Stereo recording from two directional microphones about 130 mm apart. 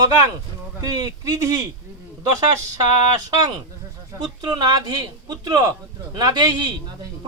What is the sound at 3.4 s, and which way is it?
A man's voice, 30° right (ahead or behind).